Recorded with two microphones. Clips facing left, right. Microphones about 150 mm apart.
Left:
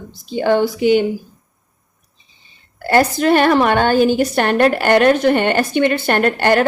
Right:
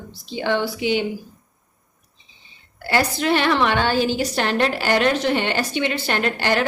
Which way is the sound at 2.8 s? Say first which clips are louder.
Left 7 dB; 45° left (ahead or behind).